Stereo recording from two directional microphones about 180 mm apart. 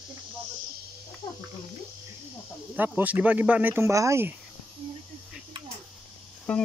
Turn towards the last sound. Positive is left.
turn(degrees=5)  # may be behind; listen again after turning